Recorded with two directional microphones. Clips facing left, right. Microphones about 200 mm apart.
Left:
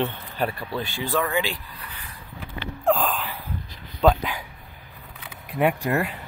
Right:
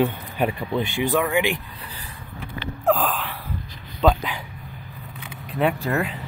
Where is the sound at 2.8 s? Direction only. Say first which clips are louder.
Right 1 dB; centre (ahead or behind); by 6.0 s 15° left (ahead or behind).